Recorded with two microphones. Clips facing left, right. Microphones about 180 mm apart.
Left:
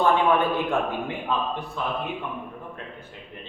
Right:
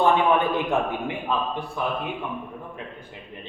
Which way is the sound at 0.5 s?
15° right (ahead or behind).